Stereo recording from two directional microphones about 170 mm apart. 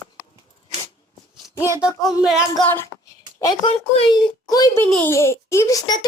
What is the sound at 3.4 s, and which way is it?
A child's voice, 25° left (ahead or behind).